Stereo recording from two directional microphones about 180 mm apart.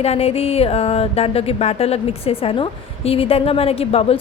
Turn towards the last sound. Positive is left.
turn(degrees=35)  # may be behind; listen again after turning